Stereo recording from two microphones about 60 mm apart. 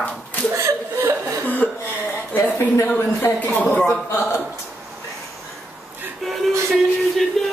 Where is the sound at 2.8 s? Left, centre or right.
Left.